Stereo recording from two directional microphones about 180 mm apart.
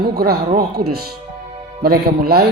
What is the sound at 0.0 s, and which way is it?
Speech, 60° right (ahead or behind).